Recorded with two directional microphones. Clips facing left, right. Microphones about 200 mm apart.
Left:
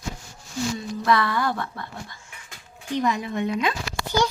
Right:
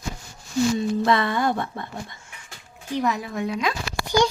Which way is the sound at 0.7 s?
25° right (ahead or behind).